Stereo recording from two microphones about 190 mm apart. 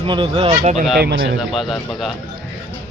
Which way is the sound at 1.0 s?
65° right (ahead or behind).